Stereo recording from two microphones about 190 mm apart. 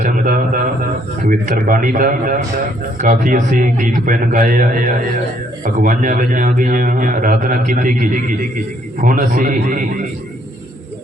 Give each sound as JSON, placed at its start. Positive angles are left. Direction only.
{"t": 0.0, "sound": "a man's voice", "side_deg": -45}